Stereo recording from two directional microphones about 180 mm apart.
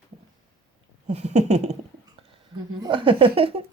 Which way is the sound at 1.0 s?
40° right (ahead or behind).